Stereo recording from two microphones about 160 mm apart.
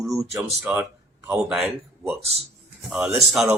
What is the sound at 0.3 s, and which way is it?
Speech, 10° right (ahead or behind).